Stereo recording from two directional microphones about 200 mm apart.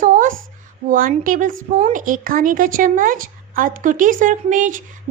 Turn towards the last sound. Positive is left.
turn(degrees=-40)  # may be behind; listen again after turning